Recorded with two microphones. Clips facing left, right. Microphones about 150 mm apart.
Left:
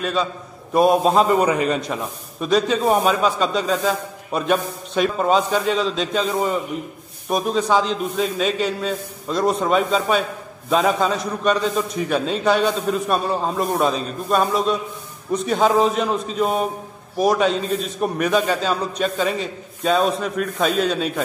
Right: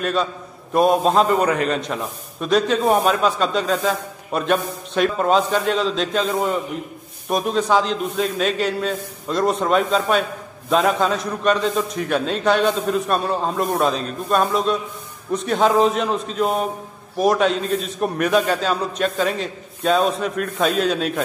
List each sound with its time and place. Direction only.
0.0 s a man's voice: centre (ahead or behind)